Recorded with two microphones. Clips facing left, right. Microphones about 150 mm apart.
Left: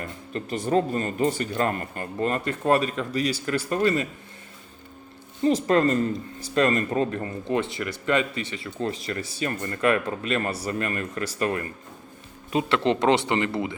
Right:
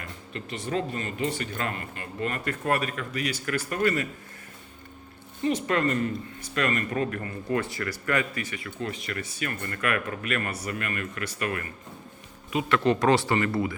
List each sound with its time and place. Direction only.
0.3 s speech: 40° left (ahead or behind); by 4.1 s 25° left (ahead or behind)
5.4 s speech: 35° left (ahead or behind)